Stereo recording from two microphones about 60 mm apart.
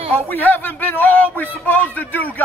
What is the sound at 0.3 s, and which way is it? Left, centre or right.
A man's voice, left.